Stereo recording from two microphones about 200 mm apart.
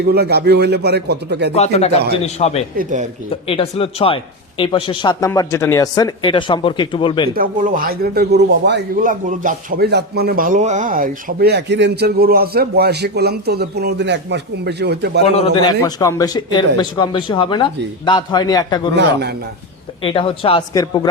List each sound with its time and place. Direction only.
0.0 s speech: 55° right (ahead or behind)
1.5 s a man's voice: 30° left (ahead or behind)
2.7 s speech: 40° right (ahead or behind)
3.4 s speech: 30° left (ahead or behind)
7.3 s speech: 45° right (ahead or behind)
9.0 s speech: 40° right (ahead or behind); by 15.2 s 55° right (ahead or behind)
15.6 s speech: 15° left (ahead or behind)
20.0 s speech: 25° left (ahead or behind)